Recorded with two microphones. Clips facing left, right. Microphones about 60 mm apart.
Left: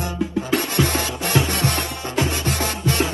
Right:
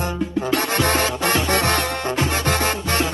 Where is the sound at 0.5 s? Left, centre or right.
Right.